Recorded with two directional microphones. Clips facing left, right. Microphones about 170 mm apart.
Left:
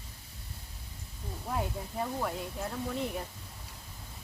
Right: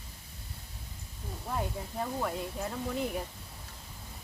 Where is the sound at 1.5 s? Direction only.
Centre (ahead or behind).